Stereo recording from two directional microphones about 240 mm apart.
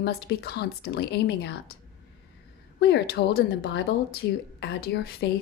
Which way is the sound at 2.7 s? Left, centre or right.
Left.